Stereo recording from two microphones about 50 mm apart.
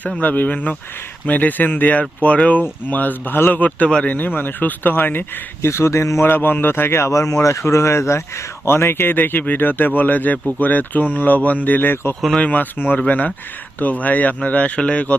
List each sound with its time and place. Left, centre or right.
0.2 s speech: left
5.6 s speech: left
6.2 s speech: left
12.4 s speech: left